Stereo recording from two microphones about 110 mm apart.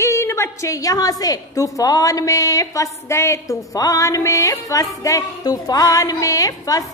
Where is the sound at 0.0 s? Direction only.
25° left (ahead or behind).